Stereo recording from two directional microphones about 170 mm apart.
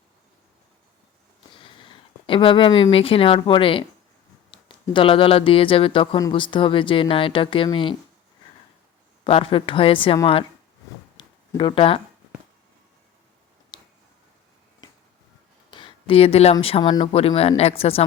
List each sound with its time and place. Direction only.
1.5 s speech: 30° left (ahead or behind)
9.2 s speech: 30° left (ahead or behind)
11.2 s a sound: 25° left (ahead or behind)
13.7 s tick-tock: 25° left (ahead or behind)
15.7 s a sound: 30° left (ahead or behind)
16.0 s speech: 35° left (ahead or behind)